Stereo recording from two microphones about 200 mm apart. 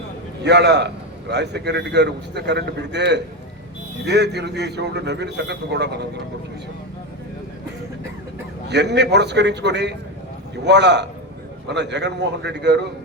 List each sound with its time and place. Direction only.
0.4 s a man's voice: 60° right (ahead or behind)
8.6 s a man's voice: 60° right (ahead or behind)